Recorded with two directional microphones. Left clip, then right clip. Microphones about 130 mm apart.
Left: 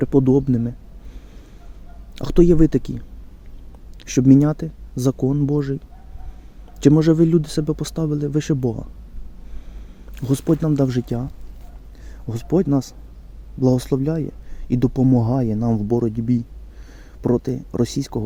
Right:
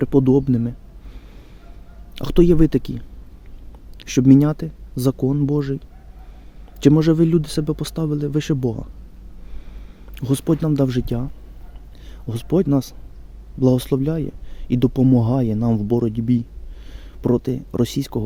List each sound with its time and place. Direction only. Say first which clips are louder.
0.0 s speech: even; 15° right (ahead or behind)
2.1 s speech: even; 15° right (ahead or behind)
10.2 s speech: even; 15° right (ahead or behind)
12.3 s speech: even; 20° right (ahead or behind)